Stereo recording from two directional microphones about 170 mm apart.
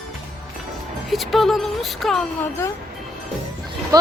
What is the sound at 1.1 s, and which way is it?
A woman's voice, centre (ahead or behind).